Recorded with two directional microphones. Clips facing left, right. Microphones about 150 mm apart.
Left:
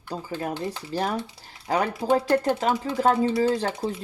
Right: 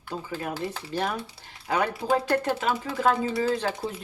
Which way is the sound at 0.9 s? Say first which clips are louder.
Left 3 dB; 35° left (ahead or behind).